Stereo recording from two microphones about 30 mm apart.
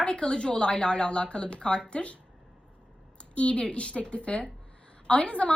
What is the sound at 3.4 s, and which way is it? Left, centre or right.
A woman's voice, left.